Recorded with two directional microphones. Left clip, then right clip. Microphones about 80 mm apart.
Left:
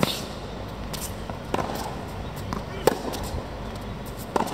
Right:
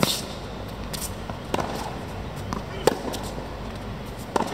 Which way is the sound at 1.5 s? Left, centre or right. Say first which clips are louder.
Even; centre.